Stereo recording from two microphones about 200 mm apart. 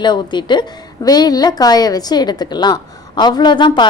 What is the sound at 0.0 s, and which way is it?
A woman's voice, 20° left (ahead or behind).